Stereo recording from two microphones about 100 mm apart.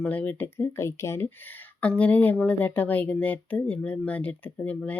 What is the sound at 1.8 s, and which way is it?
Speech, 15° left (ahead or behind).